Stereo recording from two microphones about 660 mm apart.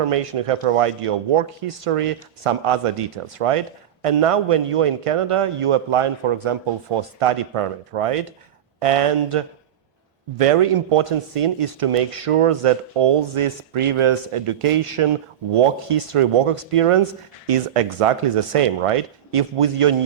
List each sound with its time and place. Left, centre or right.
0.0 s speech: right